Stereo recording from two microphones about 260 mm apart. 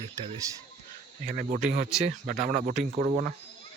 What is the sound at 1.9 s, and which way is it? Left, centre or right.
Speech, centre.